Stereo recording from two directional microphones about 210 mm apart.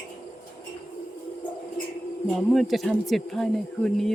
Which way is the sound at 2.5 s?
Centre (ahead or behind).